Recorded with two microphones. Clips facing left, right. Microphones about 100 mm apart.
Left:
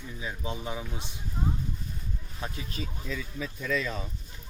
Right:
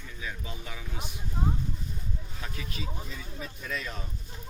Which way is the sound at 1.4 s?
15° right (ahead or behind).